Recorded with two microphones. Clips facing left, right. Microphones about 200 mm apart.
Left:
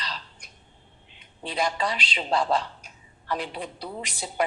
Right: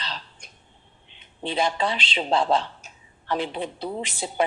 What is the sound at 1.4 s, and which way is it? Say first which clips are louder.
A woman's voice: right 3 dB; 25° right (ahead or behind).